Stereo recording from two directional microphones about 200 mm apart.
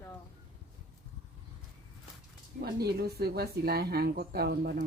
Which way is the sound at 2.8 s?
50° right (ahead or behind).